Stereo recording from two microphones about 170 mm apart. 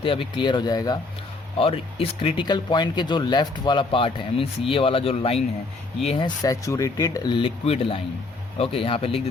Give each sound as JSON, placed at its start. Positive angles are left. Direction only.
{"t": 0.0, "sound": "speech", "side_deg": 30}